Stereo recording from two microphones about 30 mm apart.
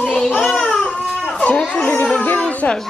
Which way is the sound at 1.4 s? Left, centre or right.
Left.